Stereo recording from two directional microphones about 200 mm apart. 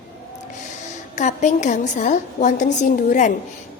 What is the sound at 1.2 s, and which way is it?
A woman's voice, 35° left (ahead or behind).